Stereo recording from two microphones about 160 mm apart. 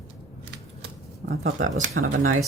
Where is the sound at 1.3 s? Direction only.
70° right (ahead or behind).